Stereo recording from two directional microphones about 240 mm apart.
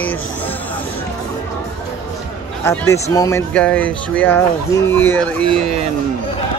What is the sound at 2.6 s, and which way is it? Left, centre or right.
Speech, centre.